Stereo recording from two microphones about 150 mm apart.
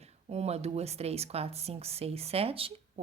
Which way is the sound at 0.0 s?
45° right (ahead or behind).